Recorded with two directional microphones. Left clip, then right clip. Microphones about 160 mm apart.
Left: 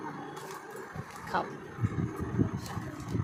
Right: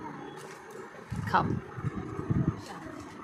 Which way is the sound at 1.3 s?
20° right (ahead or behind).